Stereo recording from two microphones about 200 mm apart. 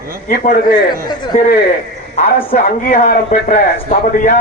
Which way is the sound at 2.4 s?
25° left (ahead or behind).